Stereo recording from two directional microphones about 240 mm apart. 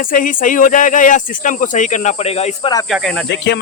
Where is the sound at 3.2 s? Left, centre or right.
Left.